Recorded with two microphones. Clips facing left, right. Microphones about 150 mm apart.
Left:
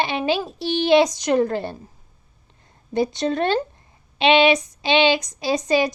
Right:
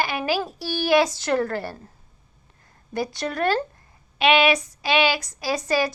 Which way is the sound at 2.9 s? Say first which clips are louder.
Left 5 dB; 20° left (ahead or behind).